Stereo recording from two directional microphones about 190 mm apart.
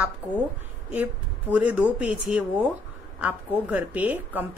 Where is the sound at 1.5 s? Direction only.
5° right (ahead or behind).